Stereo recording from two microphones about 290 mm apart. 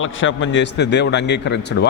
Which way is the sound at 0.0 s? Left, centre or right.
Left.